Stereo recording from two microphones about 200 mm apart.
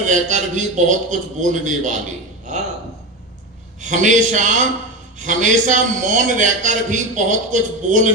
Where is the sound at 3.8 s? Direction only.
40° right (ahead or behind).